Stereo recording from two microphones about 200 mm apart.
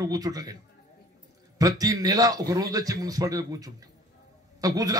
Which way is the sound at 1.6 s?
15° right (ahead or behind).